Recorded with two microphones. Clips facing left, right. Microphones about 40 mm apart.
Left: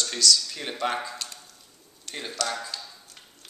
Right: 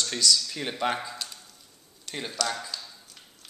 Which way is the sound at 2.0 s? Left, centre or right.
Centre.